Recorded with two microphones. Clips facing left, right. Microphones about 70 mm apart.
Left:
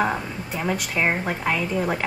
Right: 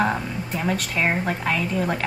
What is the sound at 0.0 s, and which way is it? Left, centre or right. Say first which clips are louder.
A woman's voice: right 1 dB; centre.